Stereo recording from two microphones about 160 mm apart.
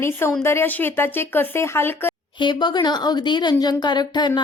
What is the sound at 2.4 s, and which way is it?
Speech, 30° left (ahead or behind).